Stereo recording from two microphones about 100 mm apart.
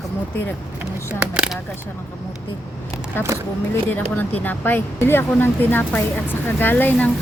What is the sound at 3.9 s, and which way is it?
Speech, 20° left (ahead or behind).